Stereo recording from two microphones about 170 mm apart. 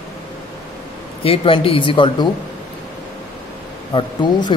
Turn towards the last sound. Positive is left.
turn(degrees=25)  # may be behind; listen again after turning